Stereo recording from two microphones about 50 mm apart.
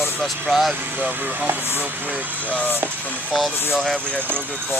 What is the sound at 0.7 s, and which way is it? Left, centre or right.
Speech, right.